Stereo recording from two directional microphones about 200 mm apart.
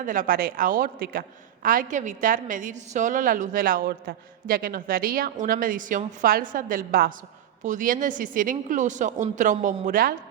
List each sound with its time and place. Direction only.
0.0 s a woman's voice: 45° right (ahead or behind)